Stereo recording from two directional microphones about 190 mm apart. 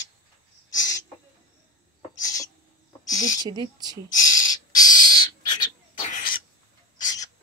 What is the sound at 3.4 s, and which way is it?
Speech, 20° right (ahead or behind).